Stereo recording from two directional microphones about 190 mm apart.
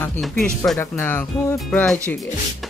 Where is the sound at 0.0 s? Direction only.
5° left (ahead or behind).